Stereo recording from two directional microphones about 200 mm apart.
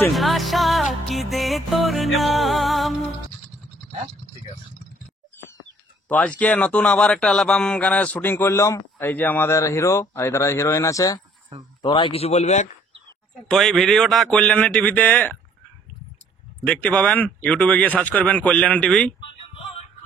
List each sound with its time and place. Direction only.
0.1 s music: centre (ahead or behind)
6.0 s a man's voice: 5° left (ahead or behind); by 12.6 s 35° left (ahead or behind)
13.5 s a man's voice: centre (ahead or behind)
16.6 s speech: 5° left (ahead or behind)